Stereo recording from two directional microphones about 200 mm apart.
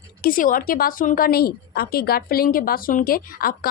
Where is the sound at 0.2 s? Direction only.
45° left (ahead or behind).